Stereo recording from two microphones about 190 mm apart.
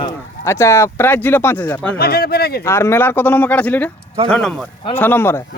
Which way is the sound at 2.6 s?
15° left (ahead or behind).